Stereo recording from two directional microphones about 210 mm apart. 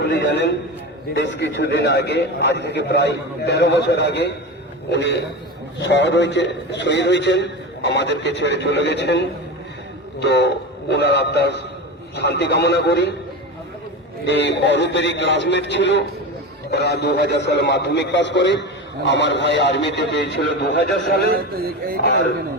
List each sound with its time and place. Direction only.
0.0 s a man's voice: 55° left (ahead or behind)
14.3 s a man's voice: 55° left (ahead or behind)